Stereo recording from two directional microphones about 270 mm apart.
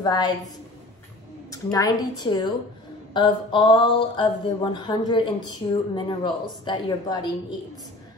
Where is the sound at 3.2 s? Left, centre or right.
Centre.